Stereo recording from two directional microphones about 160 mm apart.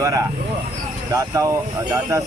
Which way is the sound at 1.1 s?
20° right (ahead or behind).